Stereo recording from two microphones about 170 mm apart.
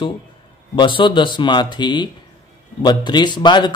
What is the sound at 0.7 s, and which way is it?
Speech, 30° left (ahead or behind).